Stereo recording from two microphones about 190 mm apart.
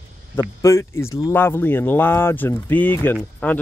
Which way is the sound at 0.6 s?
15° left (ahead or behind).